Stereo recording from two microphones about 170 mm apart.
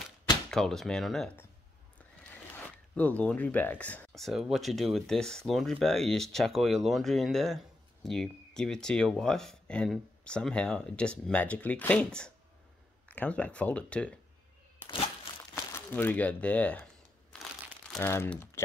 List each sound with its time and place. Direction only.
0.5 s speech: centre (ahead or behind)
2.5 s speech: 10° left (ahead or behind)
15.5 s speech: 10° left (ahead or behind)
17.3 s crumpling: 5° left (ahead or behind)
17.9 s speech: 15° left (ahead or behind)